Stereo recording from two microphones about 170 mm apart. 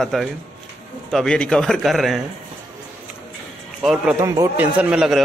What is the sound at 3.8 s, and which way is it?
Speech, 5° right (ahead or behind).